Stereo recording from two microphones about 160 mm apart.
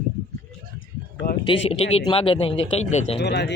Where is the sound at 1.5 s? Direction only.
35° left (ahead or behind).